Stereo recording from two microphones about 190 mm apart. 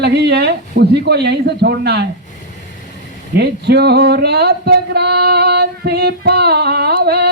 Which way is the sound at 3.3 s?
60° right (ahead or behind).